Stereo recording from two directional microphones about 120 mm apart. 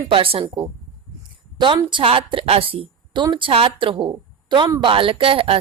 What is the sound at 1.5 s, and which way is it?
A woman's voice, 40° right (ahead or behind).